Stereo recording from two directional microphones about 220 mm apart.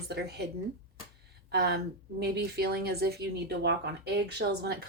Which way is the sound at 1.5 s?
45° right (ahead or behind).